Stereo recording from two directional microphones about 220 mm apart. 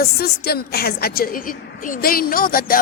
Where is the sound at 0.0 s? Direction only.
45° left (ahead or behind).